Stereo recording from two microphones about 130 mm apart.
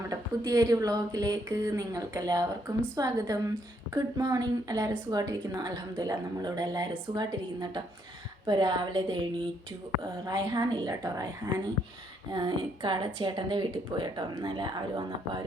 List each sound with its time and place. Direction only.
0.1 s a woman's voice: 30° right (ahead or behind)